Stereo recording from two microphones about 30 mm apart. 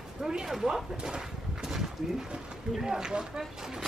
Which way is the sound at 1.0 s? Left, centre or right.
Centre.